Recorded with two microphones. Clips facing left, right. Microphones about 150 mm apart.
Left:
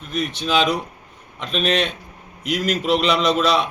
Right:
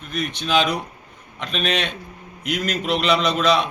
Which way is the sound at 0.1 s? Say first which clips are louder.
Even; centre (ahead or behind).